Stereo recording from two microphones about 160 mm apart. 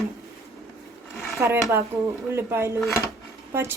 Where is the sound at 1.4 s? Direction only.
20° right (ahead or behind).